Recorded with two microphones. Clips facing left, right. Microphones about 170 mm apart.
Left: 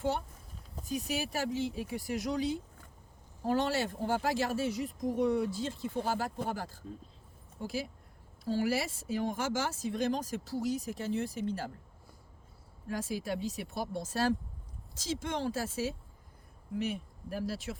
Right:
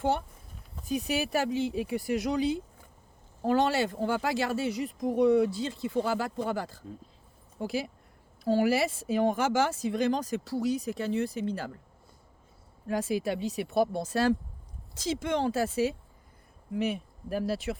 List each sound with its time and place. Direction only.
0.9 s speech: 65° right (ahead or behind)
3.4 s speech: 80° right
12.9 s speech: 70° right (ahead or behind)